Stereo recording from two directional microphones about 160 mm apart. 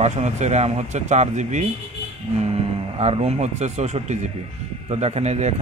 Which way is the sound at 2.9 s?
40° right (ahead or behind).